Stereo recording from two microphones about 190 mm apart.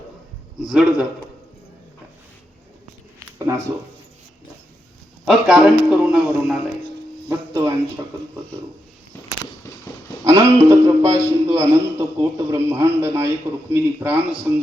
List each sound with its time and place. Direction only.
0.6 s a man's voice: centre (ahead or behind)
3.2 s a sound: 15° right (ahead or behind)
5.2 s a man's voice: 5° right (ahead or behind)
7.3 s music: 15° right (ahead or behind)
10.2 s music: 15° right (ahead or behind)
11.4 s a man's voice: 15° right (ahead or behind)